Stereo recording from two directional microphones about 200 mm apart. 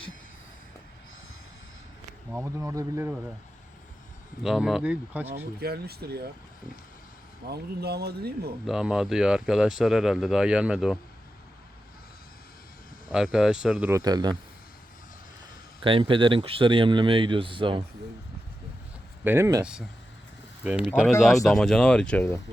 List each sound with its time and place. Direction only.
2.3 s speech: 15° right (ahead or behind)
4.4 s speech: centre (ahead or behind)
5.5 s speech: 50° right (ahead or behind)
7.4 s speech: 55° right (ahead or behind)
8.6 s speech: 5° right (ahead or behind)
13.1 s speech: 5° right (ahead or behind)
13.9 s speech: 20° right (ahead or behind)
15.8 s speech: 25° right (ahead or behind)
19.2 s speech: 10° right (ahead or behind)
20.7 s speech: 5° right (ahead or behind)